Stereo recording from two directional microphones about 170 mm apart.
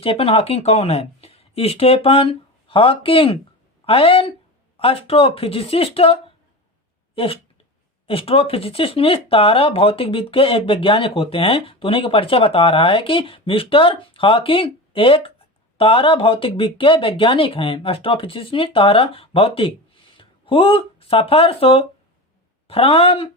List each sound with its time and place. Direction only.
0.0 s speech: 35° left (ahead or behind)
7.2 s speech: 35° left (ahead or behind)